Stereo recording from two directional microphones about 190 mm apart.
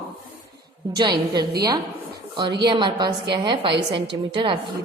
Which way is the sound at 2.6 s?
25° right (ahead or behind).